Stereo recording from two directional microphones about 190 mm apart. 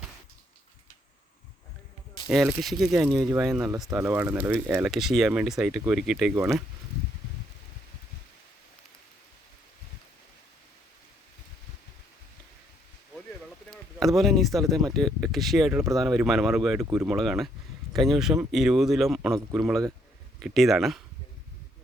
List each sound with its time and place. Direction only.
2.2 s speech: 5° right (ahead or behind)
3.1 s speech: 20° right (ahead or behind)
3.4 s speech: 5° right (ahead or behind)
14.0 s speech: centre (ahead or behind)